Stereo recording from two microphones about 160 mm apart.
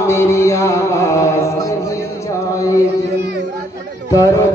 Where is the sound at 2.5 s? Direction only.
20° left (ahead or behind).